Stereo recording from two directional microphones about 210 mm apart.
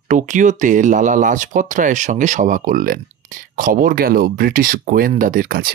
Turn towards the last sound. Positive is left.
turn(degrees=-45)  # may be behind; listen again after turning